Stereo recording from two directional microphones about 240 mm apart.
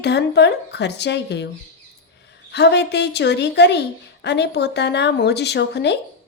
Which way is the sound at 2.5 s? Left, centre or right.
Left.